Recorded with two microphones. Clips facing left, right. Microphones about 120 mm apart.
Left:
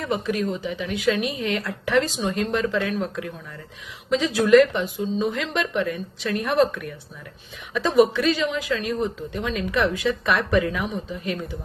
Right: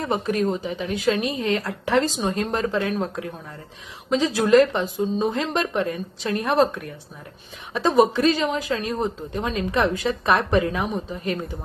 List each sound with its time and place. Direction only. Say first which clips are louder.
0.0 s speech: right 2 dB; 40° right (ahead or behind)